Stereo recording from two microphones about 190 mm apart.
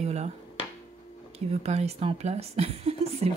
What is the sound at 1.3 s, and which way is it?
Speech, 35° right (ahead or behind).